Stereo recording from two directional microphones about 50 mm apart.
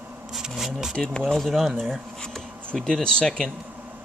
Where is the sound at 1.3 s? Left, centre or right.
Centre.